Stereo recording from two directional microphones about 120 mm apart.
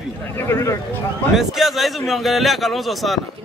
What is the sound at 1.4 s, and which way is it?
A man's voice, centre (ahead or behind).